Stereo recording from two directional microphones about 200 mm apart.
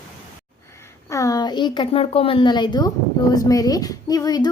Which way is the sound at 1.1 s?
15° left (ahead or behind).